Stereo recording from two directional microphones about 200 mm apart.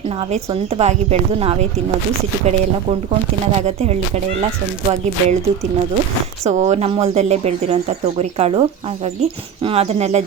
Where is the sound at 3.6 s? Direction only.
35° right (ahead or behind).